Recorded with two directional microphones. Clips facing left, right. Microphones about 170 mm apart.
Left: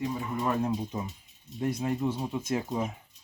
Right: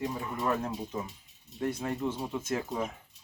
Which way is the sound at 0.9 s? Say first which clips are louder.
Left 1 dB; 20° left (ahead or behind).